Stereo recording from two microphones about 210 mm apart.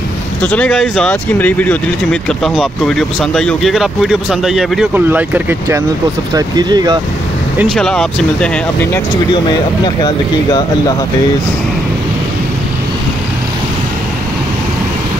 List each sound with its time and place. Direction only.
0.4 s speech: 5° left (ahead or behind); by 7.0 s 20° right (ahead or behind)
7.7 s speech: centre (ahead or behind)
10.0 s speech: 20° left (ahead or behind)